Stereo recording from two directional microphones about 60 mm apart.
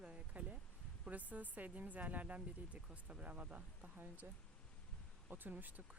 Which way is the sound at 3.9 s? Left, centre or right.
Right.